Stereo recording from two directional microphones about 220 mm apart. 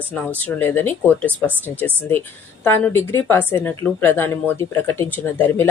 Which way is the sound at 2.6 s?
10° left (ahead or behind).